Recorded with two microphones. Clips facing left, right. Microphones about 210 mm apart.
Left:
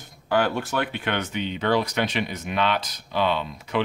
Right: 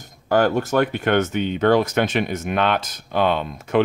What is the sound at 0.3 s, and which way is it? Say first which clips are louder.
Speech: right 5 dB; 45° right (ahead or behind).